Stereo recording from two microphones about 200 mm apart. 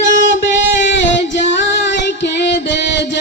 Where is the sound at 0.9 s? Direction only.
65° left (ahead or behind).